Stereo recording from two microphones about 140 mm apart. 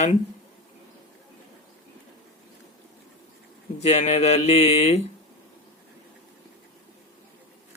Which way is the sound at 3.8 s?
50° left (ahead or behind).